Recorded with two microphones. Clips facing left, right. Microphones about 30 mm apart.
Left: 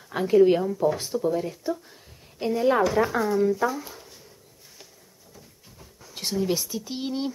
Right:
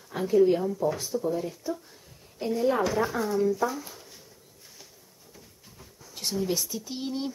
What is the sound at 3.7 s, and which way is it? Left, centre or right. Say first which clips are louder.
Speech: left 3 dB; centre.